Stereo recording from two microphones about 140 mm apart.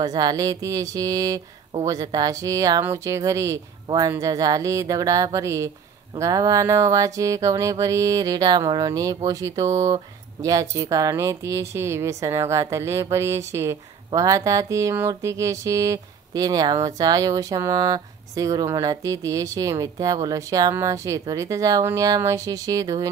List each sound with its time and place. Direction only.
0.0 s speech: 30° right (ahead or behind)